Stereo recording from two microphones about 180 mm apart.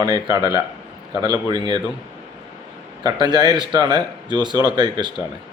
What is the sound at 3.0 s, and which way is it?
Speech, 20° right (ahead or behind).